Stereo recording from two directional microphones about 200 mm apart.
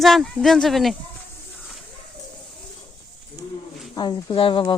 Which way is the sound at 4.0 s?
25° left (ahead or behind).